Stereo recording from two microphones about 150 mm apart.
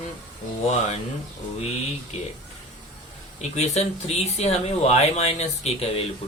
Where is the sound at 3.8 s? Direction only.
50° left (ahead or behind).